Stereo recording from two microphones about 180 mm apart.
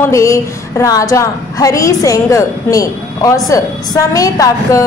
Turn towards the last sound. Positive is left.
turn(degrees=20)  # may be behind; listen again after turning